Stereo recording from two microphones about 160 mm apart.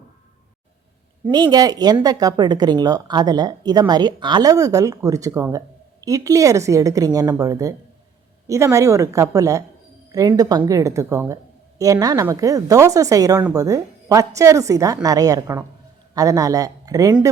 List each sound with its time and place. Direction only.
1.3 s speech: 25° right (ahead or behind)